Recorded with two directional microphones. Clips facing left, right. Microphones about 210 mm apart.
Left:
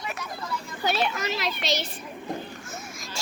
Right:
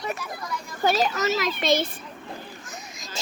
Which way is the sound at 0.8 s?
40° right (ahead or behind).